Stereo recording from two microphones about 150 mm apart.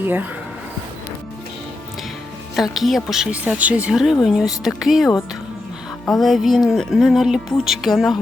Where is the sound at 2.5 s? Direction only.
Centre (ahead or behind).